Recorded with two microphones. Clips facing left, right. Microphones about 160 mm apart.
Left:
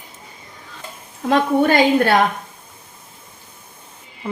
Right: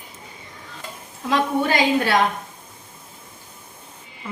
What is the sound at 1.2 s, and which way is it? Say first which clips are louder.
Speech: left 5 dB; 55° left (ahead or behind).